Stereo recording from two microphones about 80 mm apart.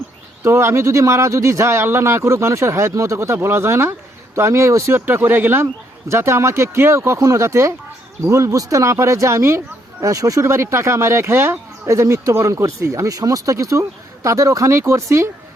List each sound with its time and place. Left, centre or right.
0.4 s speech: right
4.9 s speech: right